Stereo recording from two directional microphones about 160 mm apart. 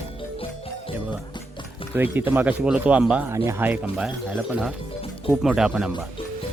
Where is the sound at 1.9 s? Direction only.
10° right (ahead or behind).